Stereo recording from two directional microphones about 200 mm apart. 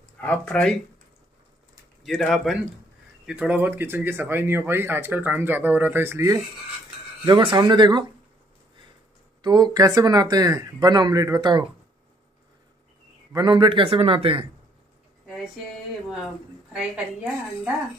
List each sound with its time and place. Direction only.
0.2 s speech: 5° left (ahead or behind)
2.0 s speech: centre (ahead or behind); by 8.0 s 20° right (ahead or behind)
9.4 s speech: 20° right (ahead or behind)
13.3 s speech: 20° right (ahead or behind)
16.7 s speech: 5° right (ahead or behind)